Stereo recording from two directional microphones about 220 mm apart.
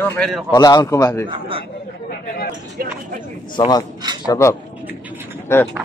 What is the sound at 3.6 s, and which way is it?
A man's voice, 15° left (ahead or behind).